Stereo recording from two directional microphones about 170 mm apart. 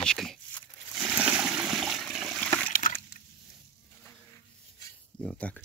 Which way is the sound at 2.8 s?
55° left (ahead or behind).